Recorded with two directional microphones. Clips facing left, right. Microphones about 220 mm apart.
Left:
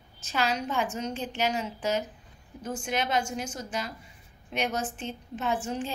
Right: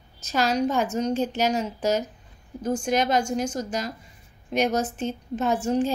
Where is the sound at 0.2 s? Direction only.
40° right (ahead or behind).